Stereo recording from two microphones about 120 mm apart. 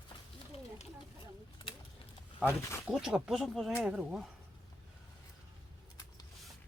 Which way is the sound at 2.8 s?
5° right (ahead or behind).